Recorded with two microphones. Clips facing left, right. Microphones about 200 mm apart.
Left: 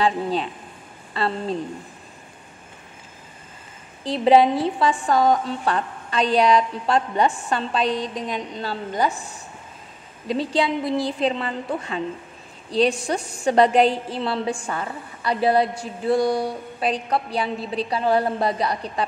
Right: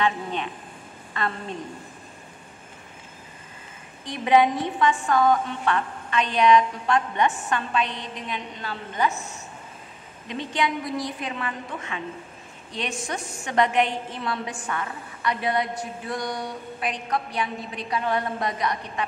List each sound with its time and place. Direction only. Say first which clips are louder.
0.0 s a woman's voice: left 4 dB; 35° left (ahead or behind)
4.0 s a woman's voice: left 4 dB; 30° left (ahead or behind)
10.2 s a woman's voice: left 5 dB; 35° left (ahead or behind)